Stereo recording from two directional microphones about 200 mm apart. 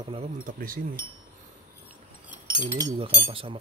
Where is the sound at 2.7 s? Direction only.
25° right (ahead or behind).